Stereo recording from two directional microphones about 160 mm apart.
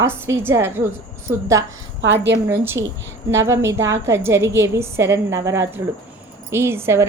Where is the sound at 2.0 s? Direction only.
90° right.